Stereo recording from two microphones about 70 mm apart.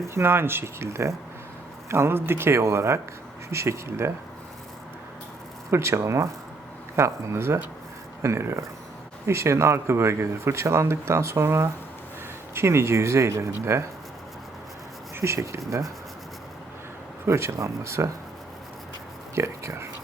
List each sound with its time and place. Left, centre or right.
0.1 s speech: right
5.7 s speech: right
15.1 s speech: right
17.2 s speech: right
19.4 s speech: right